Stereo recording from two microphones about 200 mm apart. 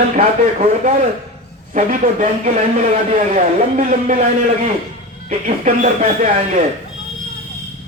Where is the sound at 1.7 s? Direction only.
40° right (ahead or behind).